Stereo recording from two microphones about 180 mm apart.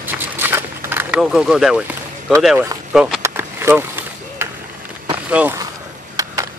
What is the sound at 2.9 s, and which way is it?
Speech, 5° right (ahead or behind).